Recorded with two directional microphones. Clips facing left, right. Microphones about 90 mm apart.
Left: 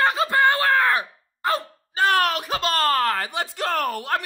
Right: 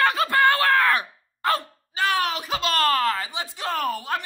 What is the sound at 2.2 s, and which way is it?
Speech, 60° left (ahead or behind).